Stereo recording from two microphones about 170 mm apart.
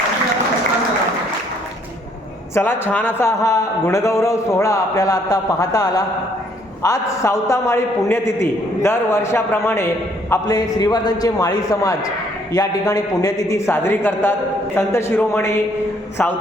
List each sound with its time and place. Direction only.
2.6 s a man's voice: 15° left (ahead or behind)